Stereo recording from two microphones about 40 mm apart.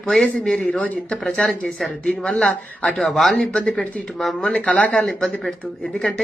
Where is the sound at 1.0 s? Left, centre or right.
Left.